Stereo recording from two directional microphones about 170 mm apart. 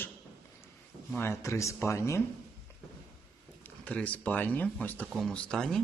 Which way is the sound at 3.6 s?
10° left (ahead or behind).